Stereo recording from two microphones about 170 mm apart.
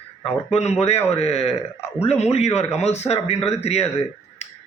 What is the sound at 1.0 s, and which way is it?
A man's voice, 40° left (ahead or behind).